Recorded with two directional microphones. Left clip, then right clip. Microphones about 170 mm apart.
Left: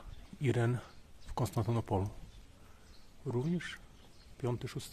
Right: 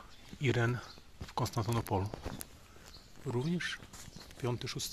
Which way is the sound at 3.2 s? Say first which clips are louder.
Right 2 dB; centre (ahead or behind).